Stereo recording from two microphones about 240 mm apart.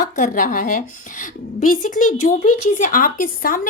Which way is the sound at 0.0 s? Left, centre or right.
Left.